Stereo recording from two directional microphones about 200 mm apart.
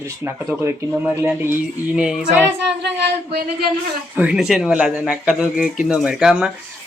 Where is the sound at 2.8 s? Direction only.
60° right (ahead or behind).